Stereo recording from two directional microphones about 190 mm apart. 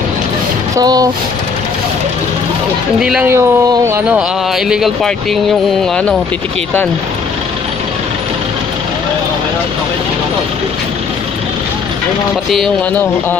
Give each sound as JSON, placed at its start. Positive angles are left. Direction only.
{"t": 0.7, "sound": "speech", "side_deg": -20}
{"t": 3.0, "sound": "speech", "side_deg": -5}
{"t": 4.6, "sound": "speech", "side_deg": 0}
{"t": 12.5, "sound": "speech", "side_deg": 5}